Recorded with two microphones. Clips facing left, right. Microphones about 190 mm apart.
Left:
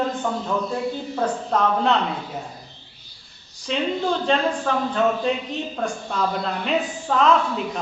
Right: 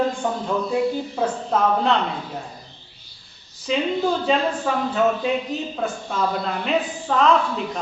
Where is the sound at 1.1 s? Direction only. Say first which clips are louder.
Even; 5° right (ahead or behind).